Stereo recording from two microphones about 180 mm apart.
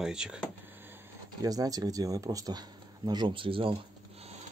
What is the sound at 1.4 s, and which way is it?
Speech, 20° right (ahead or behind).